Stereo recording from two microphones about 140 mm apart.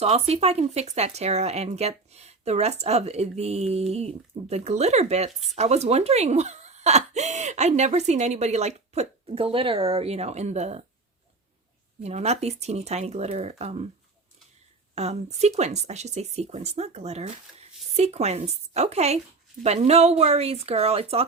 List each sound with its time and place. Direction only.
0.0 s speech: 50° right (ahead or behind)
12.0 s speech: 50° right (ahead or behind)
14.9 s speech: 50° right (ahead or behind)